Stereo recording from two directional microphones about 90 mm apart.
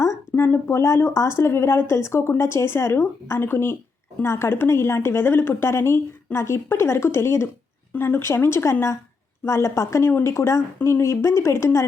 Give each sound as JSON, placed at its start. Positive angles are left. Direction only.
{"t": 0.0, "sound": "speech", "side_deg": 35}